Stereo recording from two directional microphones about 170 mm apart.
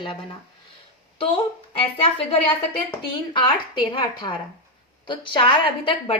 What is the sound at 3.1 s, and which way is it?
A woman's voice, 30° left (ahead or behind).